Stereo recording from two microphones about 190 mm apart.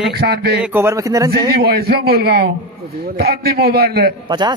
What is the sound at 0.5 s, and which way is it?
Speech, 10° right (ahead or behind).